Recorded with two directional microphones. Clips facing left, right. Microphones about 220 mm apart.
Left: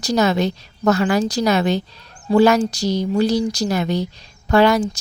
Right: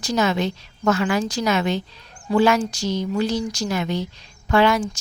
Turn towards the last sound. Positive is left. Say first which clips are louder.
# left 3 dB
turn(degrees=40)  # may be behind; listen again after turning